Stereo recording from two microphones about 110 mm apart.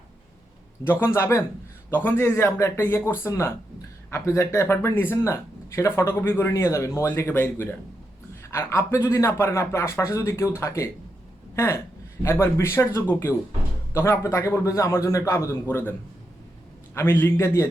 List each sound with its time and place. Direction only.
0.9 s speech: 25° left (ahead or behind)